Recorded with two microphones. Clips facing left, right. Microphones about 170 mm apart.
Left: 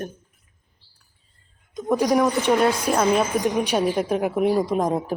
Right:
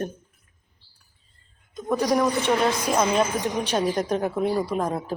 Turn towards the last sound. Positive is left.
turn(degrees=15)  # may be behind; listen again after turning